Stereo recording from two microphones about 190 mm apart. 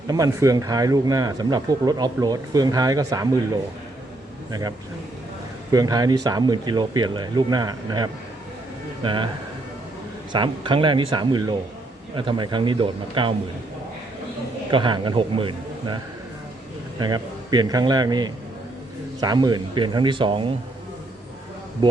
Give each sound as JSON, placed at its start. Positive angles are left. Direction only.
{"t": 0.1, "sound": "speech", "side_deg": -20}
{"t": 5.7, "sound": "speech", "side_deg": -20}
{"t": 10.3, "sound": "speech", "side_deg": -25}
{"t": 14.7, "sound": "speech", "side_deg": -25}
{"t": 17.0, "sound": "speech", "side_deg": -20}